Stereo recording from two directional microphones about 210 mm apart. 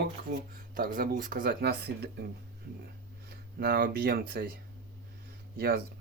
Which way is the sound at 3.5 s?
45° right (ahead or behind).